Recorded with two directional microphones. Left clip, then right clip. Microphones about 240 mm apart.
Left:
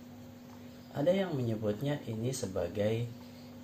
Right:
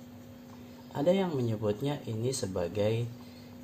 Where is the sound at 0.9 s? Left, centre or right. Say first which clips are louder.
Right 2 dB; right.